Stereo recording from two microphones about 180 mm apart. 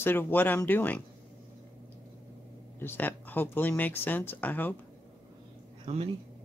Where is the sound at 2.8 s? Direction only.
10° left (ahead or behind).